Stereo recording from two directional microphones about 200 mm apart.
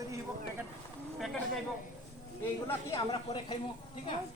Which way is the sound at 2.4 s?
15° left (ahead or behind).